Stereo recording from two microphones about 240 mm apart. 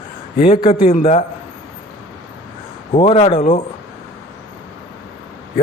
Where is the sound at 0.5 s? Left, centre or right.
Centre.